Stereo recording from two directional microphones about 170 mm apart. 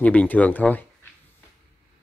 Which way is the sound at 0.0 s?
10° left (ahead or behind).